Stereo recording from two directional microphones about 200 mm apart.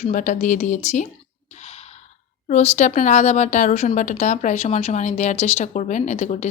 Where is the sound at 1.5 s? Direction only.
35° left (ahead or behind).